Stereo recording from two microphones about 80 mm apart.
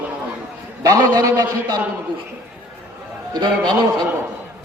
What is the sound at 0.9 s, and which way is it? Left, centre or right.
Speech, right.